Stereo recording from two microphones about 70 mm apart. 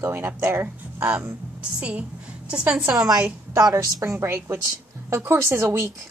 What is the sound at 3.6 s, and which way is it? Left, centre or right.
Speech, right.